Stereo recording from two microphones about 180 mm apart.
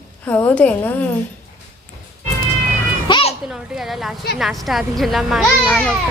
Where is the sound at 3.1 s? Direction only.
30° left (ahead or behind).